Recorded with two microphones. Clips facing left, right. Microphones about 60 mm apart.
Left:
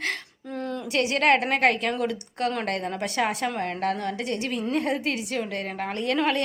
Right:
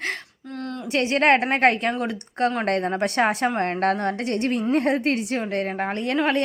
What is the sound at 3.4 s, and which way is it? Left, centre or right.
A woman's voice, right.